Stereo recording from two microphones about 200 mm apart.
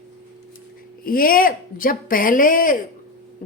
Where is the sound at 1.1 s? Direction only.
45° left (ahead or behind).